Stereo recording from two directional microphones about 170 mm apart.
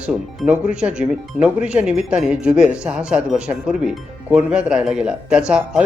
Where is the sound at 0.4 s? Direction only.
5° right (ahead or behind).